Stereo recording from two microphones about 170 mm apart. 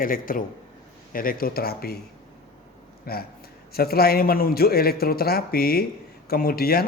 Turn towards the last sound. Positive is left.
turn(degrees=65)  # may be behind; listen again after turning